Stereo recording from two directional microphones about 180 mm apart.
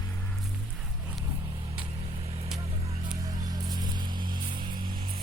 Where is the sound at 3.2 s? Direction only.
20° right (ahead or behind).